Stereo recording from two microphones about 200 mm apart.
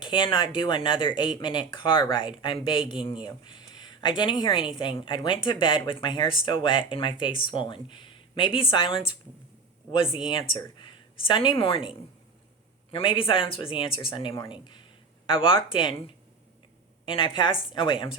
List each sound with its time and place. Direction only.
0.0 s a woman's voice: 25° left (ahead or behind)